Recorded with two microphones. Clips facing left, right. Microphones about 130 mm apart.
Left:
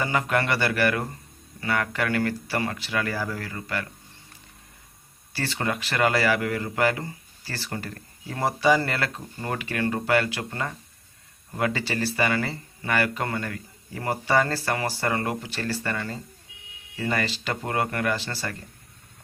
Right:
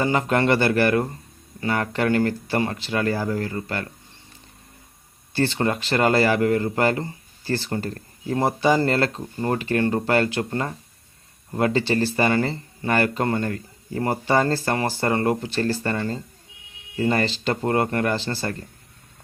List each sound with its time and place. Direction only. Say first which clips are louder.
0.0 s speech: right 4 dB; 30° right (ahead or behind)
5.3 s speech: right 6 dB; 30° right (ahead or behind)